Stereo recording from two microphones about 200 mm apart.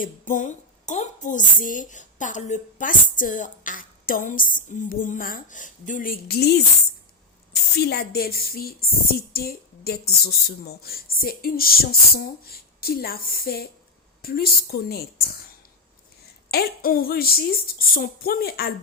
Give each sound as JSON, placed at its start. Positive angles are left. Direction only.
{"t": 0.0, "sound": "a woman's voice", "side_deg": 40}
{"t": 7.5, "sound": "speech", "side_deg": 55}
{"t": 16.5, "sound": "speech", "side_deg": 50}